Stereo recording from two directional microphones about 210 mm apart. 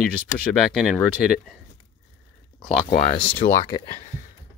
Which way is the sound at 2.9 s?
45° left (ahead or behind).